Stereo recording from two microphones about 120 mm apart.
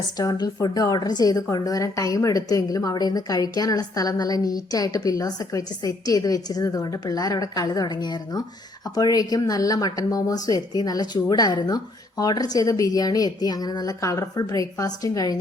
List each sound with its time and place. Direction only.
0.2 s a woman's voice: 35° left (ahead or behind)